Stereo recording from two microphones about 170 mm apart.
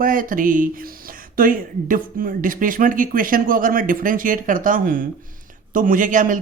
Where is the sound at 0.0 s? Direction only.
55° right (ahead or behind).